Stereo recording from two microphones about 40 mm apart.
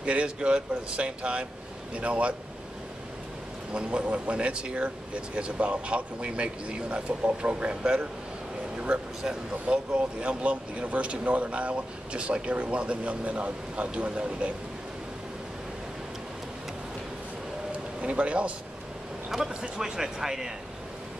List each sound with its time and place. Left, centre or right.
0.0 s speech: right
3.7 s speech: right
9.2 s speech: centre
9.9 s speech: right
18.0 s speech: right
19.3 s speech: centre